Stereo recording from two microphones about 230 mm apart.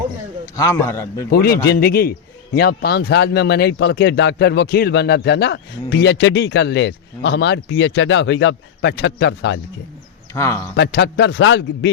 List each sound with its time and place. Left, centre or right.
0.5 s speech: centre
1.3 s a man's voice: left
10.3 s speech: centre
10.8 s speech: left